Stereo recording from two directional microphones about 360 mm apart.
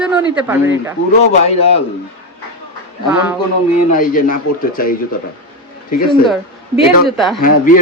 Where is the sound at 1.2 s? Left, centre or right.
Centre.